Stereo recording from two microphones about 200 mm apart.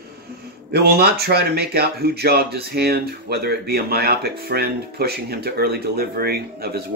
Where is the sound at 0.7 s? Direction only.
55° right (ahead or behind).